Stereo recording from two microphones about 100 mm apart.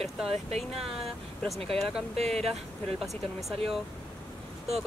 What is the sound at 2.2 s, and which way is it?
Speech, 90° right.